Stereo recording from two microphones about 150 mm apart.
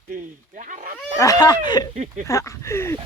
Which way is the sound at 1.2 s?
25° left (ahead or behind).